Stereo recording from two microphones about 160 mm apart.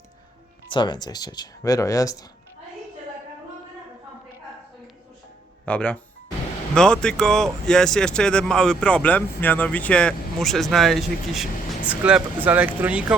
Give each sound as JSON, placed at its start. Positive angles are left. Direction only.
{"t": 0.7, "sound": "speech", "side_deg": 30}
{"t": 5.6, "sound": "speech", "side_deg": 10}